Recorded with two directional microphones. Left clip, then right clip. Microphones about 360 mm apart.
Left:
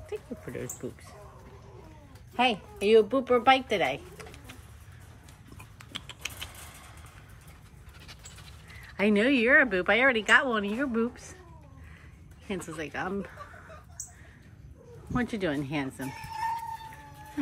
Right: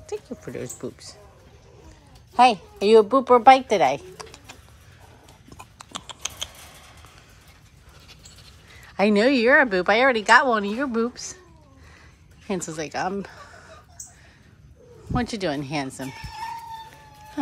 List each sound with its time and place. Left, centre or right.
0.0 s a sound: centre
2.4 s speech: right
3.2 s speech: centre
3.6 s a sound: centre
8.9 s speech: centre
12.4 s speech: centre
15.1 s speech: centre